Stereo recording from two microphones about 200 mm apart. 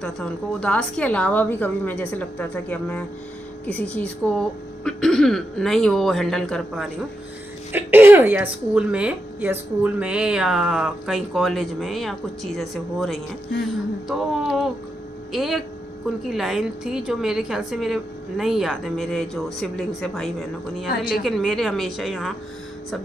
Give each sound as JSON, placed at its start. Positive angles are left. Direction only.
{"t": 0.0, "sound": "a woman's voice", "side_deg": 5}
{"t": 7.7, "sound": "a woman's voice", "side_deg": -10}
{"t": 20.9, "sound": "speech", "side_deg": 45}
{"t": 21.2, "sound": "a woman's voice", "side_deg": 0}